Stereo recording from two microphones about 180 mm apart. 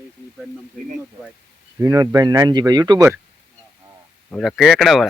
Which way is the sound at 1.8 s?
20° right (ahead or behind).